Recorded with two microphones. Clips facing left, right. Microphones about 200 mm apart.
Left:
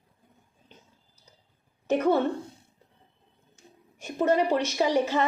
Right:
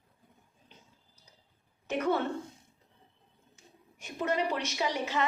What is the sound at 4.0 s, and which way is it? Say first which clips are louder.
A woman's voice: left 7 dB; 45° left (ahead or behind).